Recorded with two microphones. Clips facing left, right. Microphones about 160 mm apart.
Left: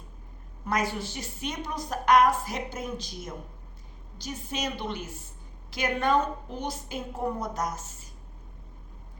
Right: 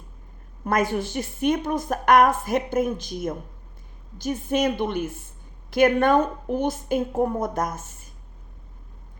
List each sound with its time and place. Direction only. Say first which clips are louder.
0.6 s a woman's voice: right 6 dB; 50° right (ahead or behind)